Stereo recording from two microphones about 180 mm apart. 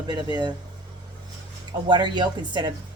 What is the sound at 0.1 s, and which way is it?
Speech, 25° right (ahead or behind).